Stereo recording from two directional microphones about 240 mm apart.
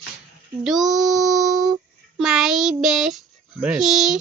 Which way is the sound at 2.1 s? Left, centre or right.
Centre.